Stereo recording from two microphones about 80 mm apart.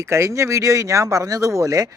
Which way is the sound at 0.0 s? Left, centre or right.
Right.